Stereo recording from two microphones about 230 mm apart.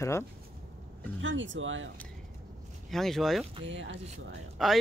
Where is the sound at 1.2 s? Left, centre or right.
Right.